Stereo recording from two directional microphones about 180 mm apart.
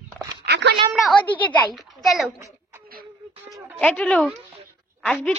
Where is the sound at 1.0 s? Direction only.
5° left (ahead or behind).